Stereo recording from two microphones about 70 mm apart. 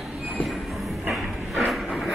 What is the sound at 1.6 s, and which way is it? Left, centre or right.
Vehicle, centre.